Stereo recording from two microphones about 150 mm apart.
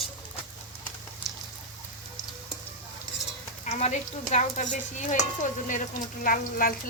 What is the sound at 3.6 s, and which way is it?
Speech, 50° left (ahead or behind).